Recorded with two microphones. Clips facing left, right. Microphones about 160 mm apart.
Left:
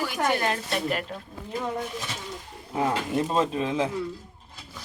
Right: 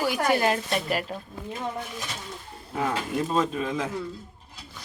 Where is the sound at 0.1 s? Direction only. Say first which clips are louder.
Right 2 dB; 10° right (ahead or behind).